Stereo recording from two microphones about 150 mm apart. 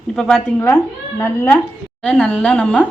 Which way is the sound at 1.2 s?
15° left (ahead or behind).